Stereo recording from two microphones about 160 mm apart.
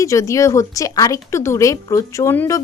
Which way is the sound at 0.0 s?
20° left (ahead or behind).